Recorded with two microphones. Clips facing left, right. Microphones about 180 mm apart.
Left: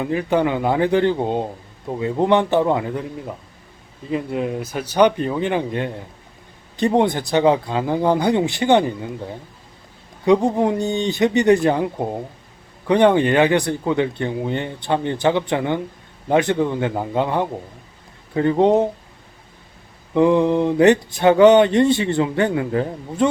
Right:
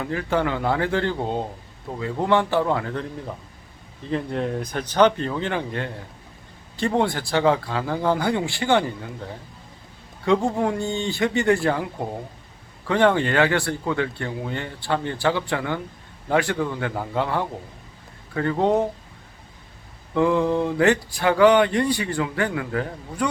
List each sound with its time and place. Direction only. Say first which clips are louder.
0.0 s speech: left 5 dB; 20° left (ahead or behind)
10.2 s speech: left 5 dB; 20° left (ahead or behind)
20.1 s speech: left 4 dB; 20° left (ahead or behind)